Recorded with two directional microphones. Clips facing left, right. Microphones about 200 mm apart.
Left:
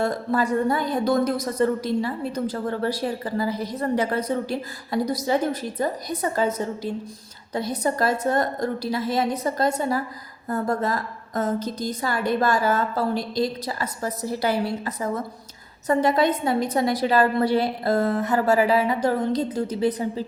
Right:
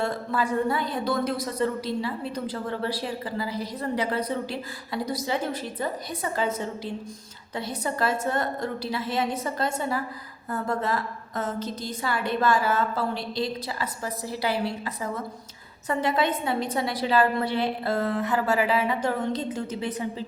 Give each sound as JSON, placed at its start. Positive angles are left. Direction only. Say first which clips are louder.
{"t": 0.0, "sound": "a woman's voice", "louder": "left 4 dB", "side_deg": 40}